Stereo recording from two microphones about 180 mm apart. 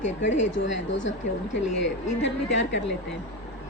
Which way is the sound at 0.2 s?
90° left.